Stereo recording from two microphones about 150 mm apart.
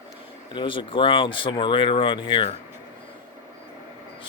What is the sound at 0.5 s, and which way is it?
Speech, 35° left (ahead or behind).